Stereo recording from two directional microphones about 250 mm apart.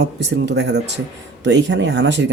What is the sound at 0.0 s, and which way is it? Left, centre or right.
Speech, right.